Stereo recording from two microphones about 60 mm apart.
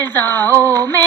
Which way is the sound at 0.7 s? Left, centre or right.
Left.